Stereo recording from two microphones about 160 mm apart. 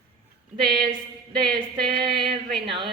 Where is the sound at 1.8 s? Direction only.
30° right (ahead or behind).